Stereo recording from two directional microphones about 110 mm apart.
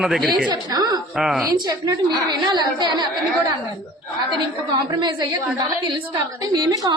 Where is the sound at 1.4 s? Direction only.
35° right (ahead or behind).